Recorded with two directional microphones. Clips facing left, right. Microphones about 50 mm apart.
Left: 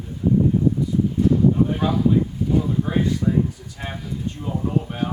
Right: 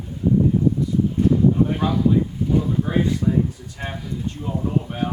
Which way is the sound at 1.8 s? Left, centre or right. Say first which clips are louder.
Even; centre.